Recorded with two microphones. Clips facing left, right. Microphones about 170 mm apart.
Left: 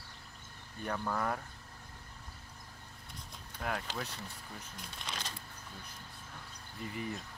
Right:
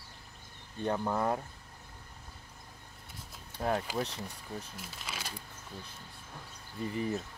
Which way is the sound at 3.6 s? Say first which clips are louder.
Right 6 dB; 30° right (ahead or behind).